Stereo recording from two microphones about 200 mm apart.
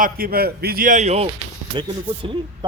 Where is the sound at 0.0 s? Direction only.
50° right (ahead or behind).